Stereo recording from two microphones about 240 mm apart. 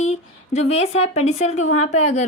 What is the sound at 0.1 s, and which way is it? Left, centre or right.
A woman's voice, left.